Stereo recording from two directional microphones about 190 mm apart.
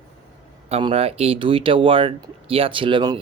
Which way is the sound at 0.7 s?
30° right (ahead or behind).